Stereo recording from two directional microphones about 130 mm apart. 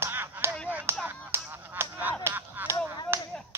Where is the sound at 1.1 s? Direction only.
20° right (ahead or behind).